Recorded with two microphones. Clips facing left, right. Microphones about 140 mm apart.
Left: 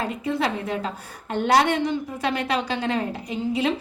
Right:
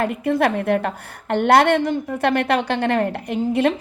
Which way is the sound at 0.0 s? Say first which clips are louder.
Right 6 dB; 55° right (ahead or behind).